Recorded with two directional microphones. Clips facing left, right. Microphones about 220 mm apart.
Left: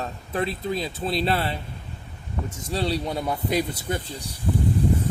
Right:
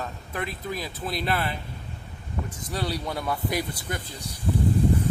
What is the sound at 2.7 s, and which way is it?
Speech, 25° left (ahead or behind).